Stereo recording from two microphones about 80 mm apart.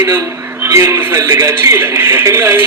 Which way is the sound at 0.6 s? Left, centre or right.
Right.